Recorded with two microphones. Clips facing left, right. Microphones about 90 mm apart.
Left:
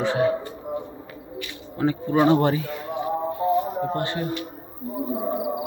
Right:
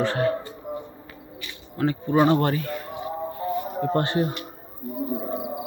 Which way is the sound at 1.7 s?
15° left (ahead or behind).